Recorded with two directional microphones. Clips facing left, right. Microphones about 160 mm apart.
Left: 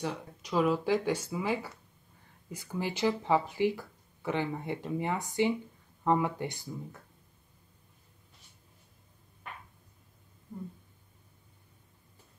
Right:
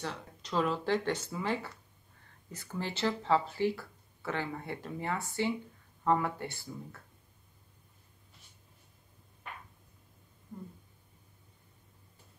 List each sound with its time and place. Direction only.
0.0 s speech: 10° left (ahead or behind)